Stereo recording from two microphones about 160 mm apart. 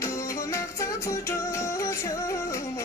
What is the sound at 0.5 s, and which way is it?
Music, 20° left (ahead or behind).